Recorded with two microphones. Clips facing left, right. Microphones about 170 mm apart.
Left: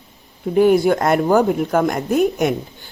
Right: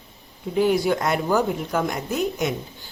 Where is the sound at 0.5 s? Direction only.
55° left (ahead or behind).